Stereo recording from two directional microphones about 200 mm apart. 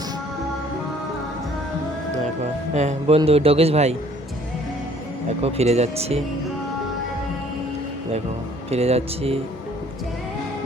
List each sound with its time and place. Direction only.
2.4 s a man's voice: 35° right (ahead or behind)
5.4 s speech: 30° right (ahead or behind)
8.7 s speech: 30° right (ahead or behind)